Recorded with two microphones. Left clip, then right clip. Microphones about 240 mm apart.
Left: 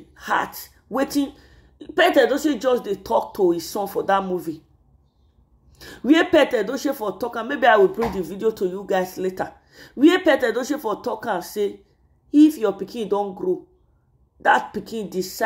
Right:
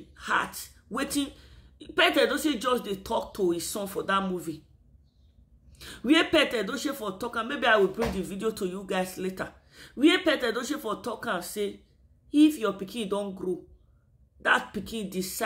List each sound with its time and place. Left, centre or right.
0.1 s gasp: centre
0.6 s speech: centre
5.8 s speech: centre
14.9 s speech: centre